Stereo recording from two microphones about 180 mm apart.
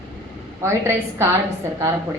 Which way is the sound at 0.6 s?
15° right (ahead or behind).